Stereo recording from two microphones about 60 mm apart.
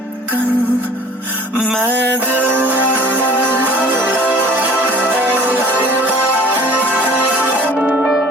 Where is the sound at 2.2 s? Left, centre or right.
Right.